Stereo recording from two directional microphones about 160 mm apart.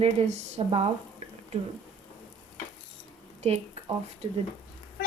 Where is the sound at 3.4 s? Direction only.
40° right (ahead or behind).